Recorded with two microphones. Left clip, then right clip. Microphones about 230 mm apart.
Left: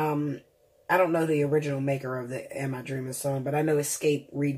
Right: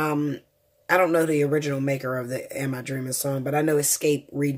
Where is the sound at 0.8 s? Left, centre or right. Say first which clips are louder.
Right 3 dB; right.